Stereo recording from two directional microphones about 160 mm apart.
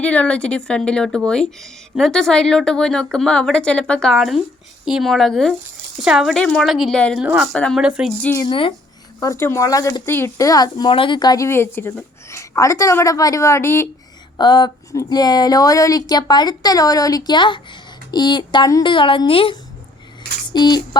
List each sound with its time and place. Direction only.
0.0 s speech: 10° left (ahead or behind)
7.5 s speech: 5° left (ahead or behind)
7.8 s speech: 5° right (ahead or behind)
8.4 s speech: 30° left (ahead or behind)
9.2 s a woman's voice: 15° left (ahead or behind)
14.3 s a woman's voice: 30° left (ahead or behind)